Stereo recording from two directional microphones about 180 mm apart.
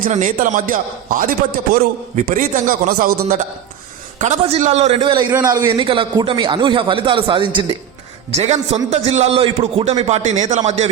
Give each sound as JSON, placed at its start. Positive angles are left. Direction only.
{"t": 0.0, "sound": "a man's voice", "side_deg": -45}
{"t": 4.2, "sound": "a man's voice", "side_deg": -40}
{"t": 8.3, "sound": "a man's voice", "side_deg": -40}